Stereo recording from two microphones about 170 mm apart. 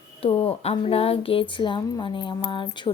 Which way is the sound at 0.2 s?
35° left (ahead or behind).